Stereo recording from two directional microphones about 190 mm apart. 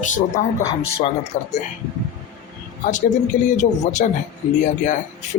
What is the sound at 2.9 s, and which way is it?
Speech, 40° left (ahead or behind).